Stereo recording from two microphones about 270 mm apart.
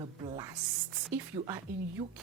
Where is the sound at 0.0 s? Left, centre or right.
Centre.